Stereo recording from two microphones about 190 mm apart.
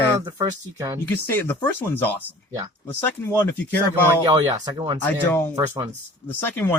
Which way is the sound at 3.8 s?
20° right (ahead or behind).